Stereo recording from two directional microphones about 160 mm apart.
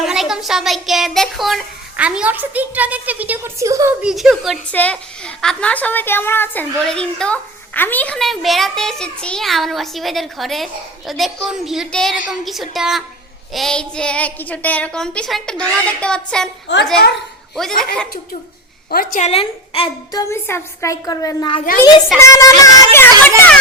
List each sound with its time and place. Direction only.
0.0 s a child's voice: centre (ahead or behind); by 3.9 s 20° right (ahead or behind)
4.0 s a woman's voice: centre (ahead or behind)
16.7 s a woman's voice: 90° left
17.5 s a woman's voice: centre (ahead or behind)
18.9 s a woman's voice: 70° left (ahead or behind)
19.2 s a woman's voice: 35° left (ahead or behind)
20.2 s a woman's voice: 15° left (ahead or behind)
21.6 s a child's voice: 65° left (ahead or behind)
22.2 s a woman's voice: 20° left (ahead or behind)